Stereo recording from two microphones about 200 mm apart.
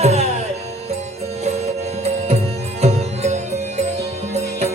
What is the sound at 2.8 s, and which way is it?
Music, 35° right (ahead or behind).